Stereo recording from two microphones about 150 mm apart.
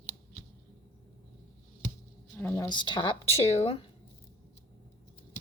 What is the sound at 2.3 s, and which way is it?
Speech, 15° left (ahead or behind).